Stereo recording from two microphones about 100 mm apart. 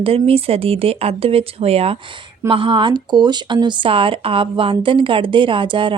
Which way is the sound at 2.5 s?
60° right (ahead or behind).